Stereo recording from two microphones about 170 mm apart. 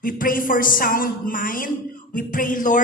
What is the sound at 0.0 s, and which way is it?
A woman's voice, 55° left (ahead or behind).